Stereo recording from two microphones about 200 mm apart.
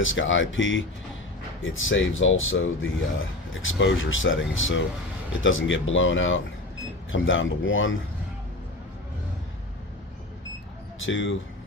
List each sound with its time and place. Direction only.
0.0 s speech: 75° left (ahead or behind)
11.0 s speech: 70° left (ahead or behind)